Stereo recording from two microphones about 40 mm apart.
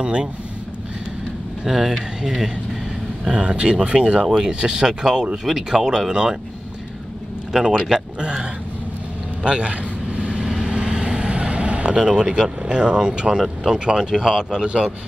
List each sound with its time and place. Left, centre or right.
0.0 s speech: right
1.7 s speech: centre
7.5 s speech: centre
9.4 s vehicle: right
12.0 s speech: centre